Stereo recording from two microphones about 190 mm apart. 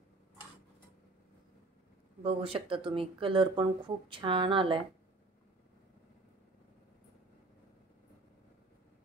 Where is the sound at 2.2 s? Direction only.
30° right (ahead or behind).